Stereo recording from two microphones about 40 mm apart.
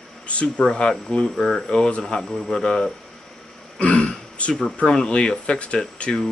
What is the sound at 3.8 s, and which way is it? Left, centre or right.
Throat clearing, left.